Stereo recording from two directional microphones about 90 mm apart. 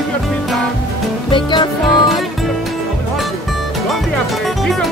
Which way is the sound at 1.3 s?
60° left (ahead or behind).